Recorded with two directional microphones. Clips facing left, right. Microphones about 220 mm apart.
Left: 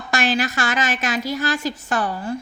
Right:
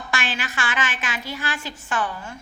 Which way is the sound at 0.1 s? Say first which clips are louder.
Left 9 dB; 40° left (ahead or behind).